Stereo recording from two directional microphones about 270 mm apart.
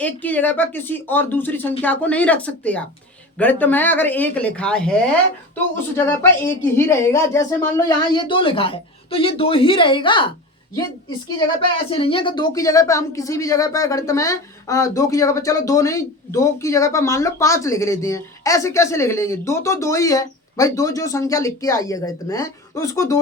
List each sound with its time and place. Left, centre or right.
0.0 s speech: centre
11.9 s speech: centre